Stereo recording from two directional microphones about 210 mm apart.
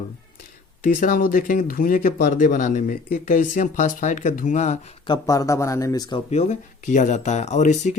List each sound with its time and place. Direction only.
0.8 s speech: 40° left (ahead or behind)
5.1 s speech: 15° left (ahead or behind)
6.3 s speech: 35° left (ahead or behind)